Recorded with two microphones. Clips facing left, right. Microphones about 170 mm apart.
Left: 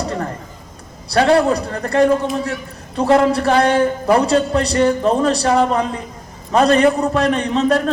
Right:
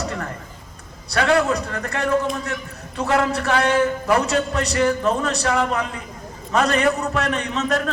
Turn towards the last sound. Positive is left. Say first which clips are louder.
# left 7 dB
turn(degrees=35)  # may be behind; listen again after turning